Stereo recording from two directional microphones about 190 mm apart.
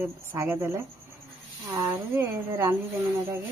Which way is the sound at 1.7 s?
10° right (ahead or behind).